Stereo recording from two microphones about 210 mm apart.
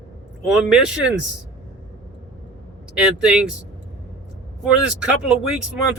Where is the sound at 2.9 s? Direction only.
5° right (ahead or behind).